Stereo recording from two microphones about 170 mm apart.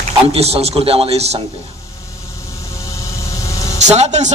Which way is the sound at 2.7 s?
20° left (ahead or behind).